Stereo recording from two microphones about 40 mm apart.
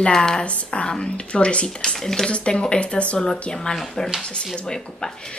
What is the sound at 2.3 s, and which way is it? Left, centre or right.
Speech, left.